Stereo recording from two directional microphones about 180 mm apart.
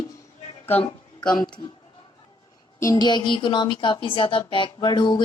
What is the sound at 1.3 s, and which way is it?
Speech, 25° left (ahead or behind).